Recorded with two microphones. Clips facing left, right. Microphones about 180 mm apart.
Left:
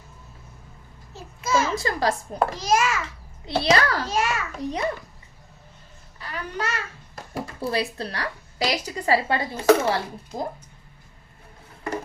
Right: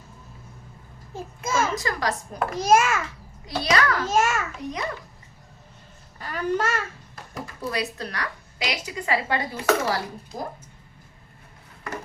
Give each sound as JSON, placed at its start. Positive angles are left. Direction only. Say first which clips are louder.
{"t": 1.1, "sound": "a child's voice", "louder": "left 2 dB", "side_deg": -50}
{"t": 1.7, "sound": "a woman's voice", "louder": "left 3 dB", "side_deg": 30}
{"t": 2.6, "sound": "a child's voice", "louder": "right 6 dB", "side_deg": -50}
{"t": 3.4, "sound": "a woman's voice", "louder": "left 2 dB", "side_deg": 30}
{"t": 4.1, "sound": "a child's voice", "louder": "right 3 dB", "side_deg": -45}
{"t": 6.1, "sound": "a child's voice", "louder": "right 6 dB", "side_deg": -45}
{"t": 7.3, "sound": "a woman's voice", "louder": "left 3 dB", "side_deg": 30}